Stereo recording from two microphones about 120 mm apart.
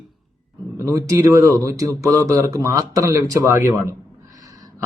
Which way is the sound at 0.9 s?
25° right (ahead or behind).